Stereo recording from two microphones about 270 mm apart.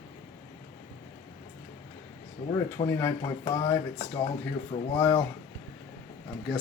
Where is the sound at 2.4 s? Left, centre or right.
Left.